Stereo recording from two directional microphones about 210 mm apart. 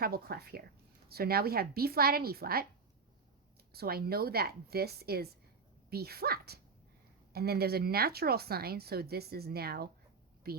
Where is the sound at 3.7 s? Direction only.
45° right (ahead or behind).